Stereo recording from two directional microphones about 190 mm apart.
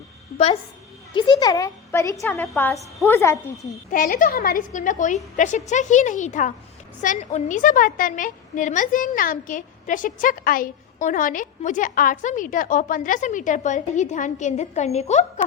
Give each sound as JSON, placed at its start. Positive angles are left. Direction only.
{"t": 1.1, "sound": "a woman's voice", "side_deg": 20}
{"t": 3.9, "sound": "a woman's voice", "side_deg": 45}